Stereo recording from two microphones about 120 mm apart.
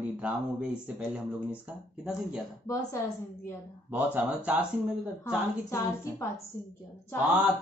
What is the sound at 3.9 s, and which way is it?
Speech, 10° right (ahead or behind).